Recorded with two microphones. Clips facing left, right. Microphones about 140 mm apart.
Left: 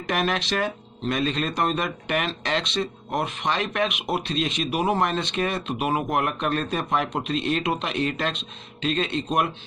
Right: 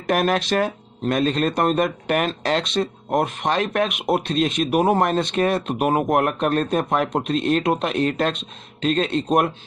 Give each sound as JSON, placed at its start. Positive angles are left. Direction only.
{"t": 0.1, "sound": "speech", "side_deg": -45}